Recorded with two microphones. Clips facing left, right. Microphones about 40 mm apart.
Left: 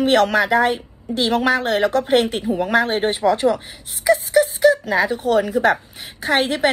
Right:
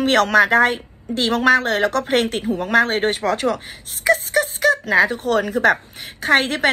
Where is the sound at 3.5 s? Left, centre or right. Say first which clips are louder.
Left 1 dB; right.